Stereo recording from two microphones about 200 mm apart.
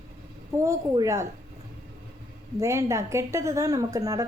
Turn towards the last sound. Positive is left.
turn(degrees=-15)  # may be behind; listen again after turning